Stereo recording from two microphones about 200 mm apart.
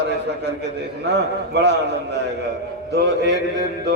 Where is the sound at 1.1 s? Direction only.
60° right (ahead or behind).